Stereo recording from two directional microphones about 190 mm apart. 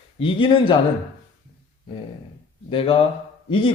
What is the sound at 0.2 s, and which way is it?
Speech, 25° left (ahead or behind).